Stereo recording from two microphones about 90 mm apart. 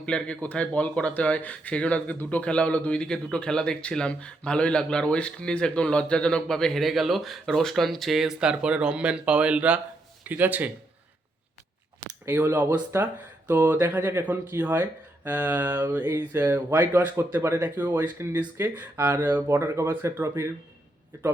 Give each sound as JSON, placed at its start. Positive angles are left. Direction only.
{"t": 0.0, "sound": "speech", "side_deg": 10}
{"t": 12.2, "sound": "speech", "side_deg": -25}